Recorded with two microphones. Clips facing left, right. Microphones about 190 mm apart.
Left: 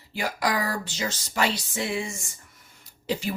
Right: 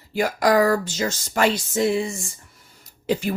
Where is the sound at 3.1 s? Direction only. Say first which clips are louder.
Right 5 dB; 55° right (ahead or behind).